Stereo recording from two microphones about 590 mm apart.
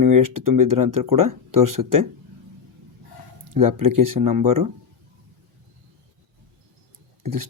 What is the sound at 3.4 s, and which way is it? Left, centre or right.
Speech, right.